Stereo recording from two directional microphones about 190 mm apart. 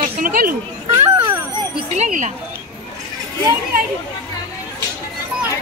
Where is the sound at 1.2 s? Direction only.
15° right (ahead or behind).